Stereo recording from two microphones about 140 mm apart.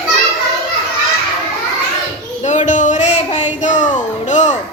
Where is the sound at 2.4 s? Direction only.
60° left (ahead or behind).